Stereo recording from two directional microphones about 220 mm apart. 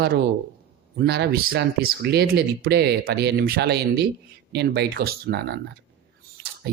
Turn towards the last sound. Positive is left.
turn(degrees=-50)  # may be behind; listen again after turning